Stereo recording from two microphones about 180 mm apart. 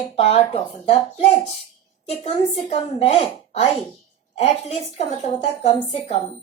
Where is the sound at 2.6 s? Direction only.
35° left (ahead or behind).